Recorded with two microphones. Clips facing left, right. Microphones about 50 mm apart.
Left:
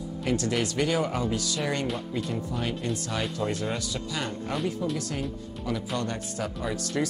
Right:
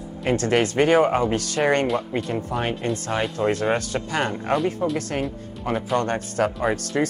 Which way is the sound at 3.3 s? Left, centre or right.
Right.